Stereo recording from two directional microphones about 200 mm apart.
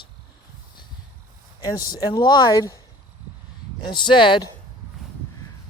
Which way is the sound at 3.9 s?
25° left (ahead or behind).